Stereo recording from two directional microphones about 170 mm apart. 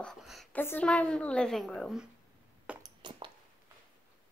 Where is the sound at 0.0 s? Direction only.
Centre (ahead or behind).